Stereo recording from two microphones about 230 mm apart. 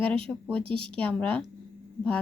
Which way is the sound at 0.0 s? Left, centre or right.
Centre.